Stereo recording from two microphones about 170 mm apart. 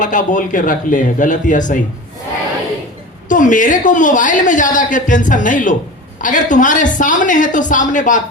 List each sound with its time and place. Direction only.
0.0 s a woman's voice: 50° left (ahead or behind)
3.2 s a woman's voice: 50° left (ahead or behind)